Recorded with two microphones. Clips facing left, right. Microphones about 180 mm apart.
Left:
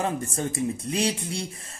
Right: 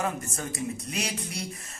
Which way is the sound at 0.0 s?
30° left (ahead or behind).